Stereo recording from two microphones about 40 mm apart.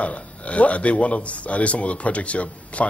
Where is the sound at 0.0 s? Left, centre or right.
Left.